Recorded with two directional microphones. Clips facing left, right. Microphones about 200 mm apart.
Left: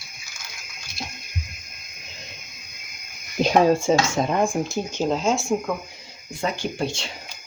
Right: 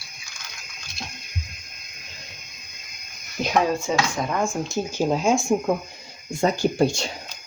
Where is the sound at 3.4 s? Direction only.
30° left (ahead or behind).